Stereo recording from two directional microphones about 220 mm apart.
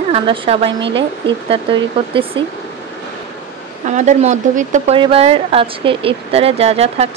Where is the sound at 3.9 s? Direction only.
35° right (ahead or behind).